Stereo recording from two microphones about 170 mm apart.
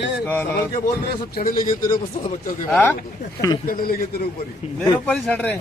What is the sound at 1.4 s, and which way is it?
Speech, 55° left (ahead or behind).